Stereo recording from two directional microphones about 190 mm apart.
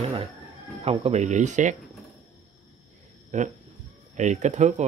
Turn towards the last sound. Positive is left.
turn(degrees=-40)  # may be behind; listen again after turning